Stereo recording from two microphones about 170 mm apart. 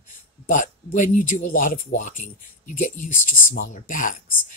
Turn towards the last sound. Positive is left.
turn(degrees=50)  # may be behind; listen again after turning